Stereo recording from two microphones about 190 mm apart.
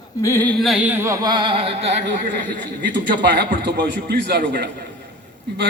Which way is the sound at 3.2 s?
60° right (ahead or behind).